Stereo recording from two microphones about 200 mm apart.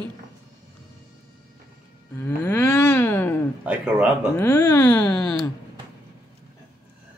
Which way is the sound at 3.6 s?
5° right (ahead or behind).